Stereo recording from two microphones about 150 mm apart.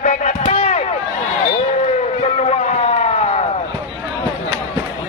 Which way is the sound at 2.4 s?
50° left (ahead or behind).